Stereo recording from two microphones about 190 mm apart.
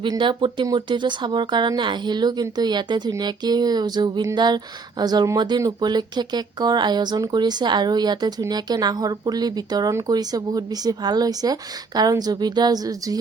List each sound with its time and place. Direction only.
0.0 s speech: 25° right (ahead or behind)